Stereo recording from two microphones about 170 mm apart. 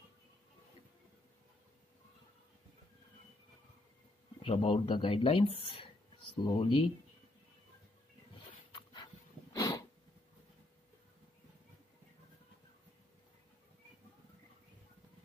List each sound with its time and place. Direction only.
4.4 s speech: 35° left (ahead or behind)
8.7 s dog: 25° left (ahead or behind)